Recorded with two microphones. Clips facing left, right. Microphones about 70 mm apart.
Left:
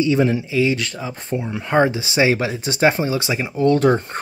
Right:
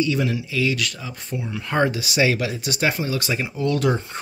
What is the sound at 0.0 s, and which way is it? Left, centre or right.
Speech, left.